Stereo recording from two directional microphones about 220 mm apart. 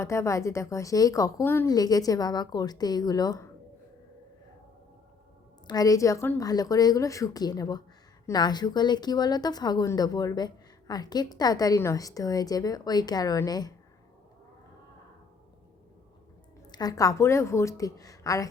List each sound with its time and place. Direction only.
0.0 s speech: 15° left (ahead or behind)
5.6 s speech: 15° left (ahead or behind)
16.6 s speech: 20° left (ahead or behind)